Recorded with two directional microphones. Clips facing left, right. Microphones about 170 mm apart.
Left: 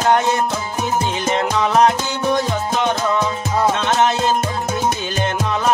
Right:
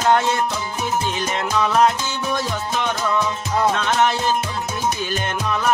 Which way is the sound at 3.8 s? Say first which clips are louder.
Left 2 dB; 25° left (ahead or behind).